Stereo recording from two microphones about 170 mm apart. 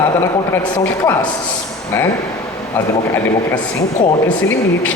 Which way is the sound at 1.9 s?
15° left (ahead or behind).